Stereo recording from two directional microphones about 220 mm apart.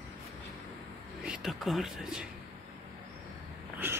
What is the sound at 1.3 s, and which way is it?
Speech, centre (ahead or behind).